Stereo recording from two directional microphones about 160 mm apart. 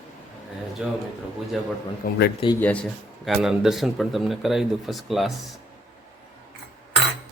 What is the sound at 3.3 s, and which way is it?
Speech, centre (ahead or behind).